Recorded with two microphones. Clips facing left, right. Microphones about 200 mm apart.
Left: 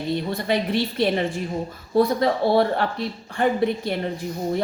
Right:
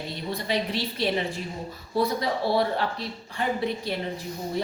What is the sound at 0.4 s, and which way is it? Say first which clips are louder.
A woman's voice: left 4 dB; 55° left (ahead or behind).